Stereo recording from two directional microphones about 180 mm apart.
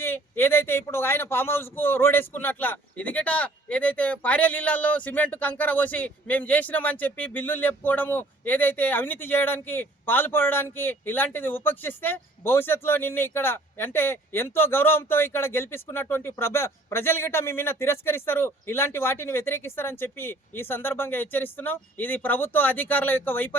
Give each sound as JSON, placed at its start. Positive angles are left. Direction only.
{"t": 0.0, "sound": "speech", "side_deg": 10}